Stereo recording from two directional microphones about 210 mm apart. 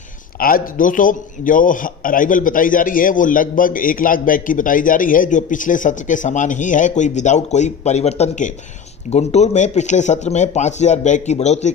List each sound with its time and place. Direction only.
0.4 s a man's voice: 45° left (ahead or behind)